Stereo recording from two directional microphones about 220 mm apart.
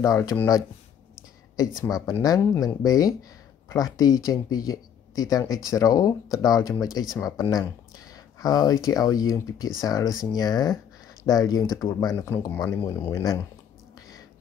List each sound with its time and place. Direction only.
0.0 s speech: 15° left (ahead or behind)
1.9 s speech: 15° left (ahead or behind)